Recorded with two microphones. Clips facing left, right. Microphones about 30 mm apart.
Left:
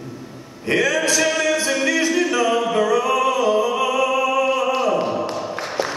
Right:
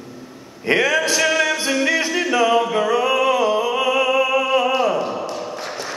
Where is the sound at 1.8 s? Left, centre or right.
Right.